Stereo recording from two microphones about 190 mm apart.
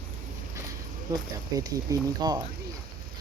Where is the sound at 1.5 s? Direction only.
20° right (ahead or behind).